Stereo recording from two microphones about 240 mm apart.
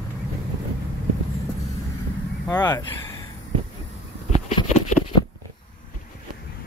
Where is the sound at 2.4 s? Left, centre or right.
Centre.